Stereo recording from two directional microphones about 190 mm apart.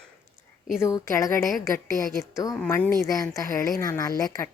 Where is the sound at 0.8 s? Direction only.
15° left (ahead or behind).